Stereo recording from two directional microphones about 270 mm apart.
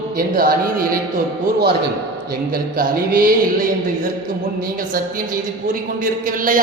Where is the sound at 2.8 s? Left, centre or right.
Right.